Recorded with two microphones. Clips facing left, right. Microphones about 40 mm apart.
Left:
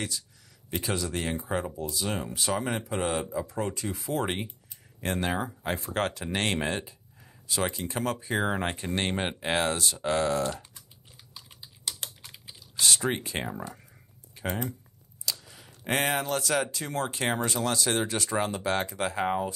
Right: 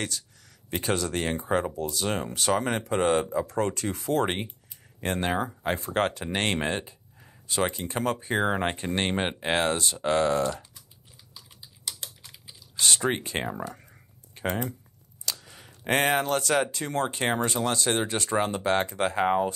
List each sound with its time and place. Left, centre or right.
0.7 s speech: right
2.9 s speech: right
3.4 s speech: right
12.8 s speech: right
13.4 s speech: centre
14.4 s typing: right
15.2 s a sound: right
15.9 s speech: right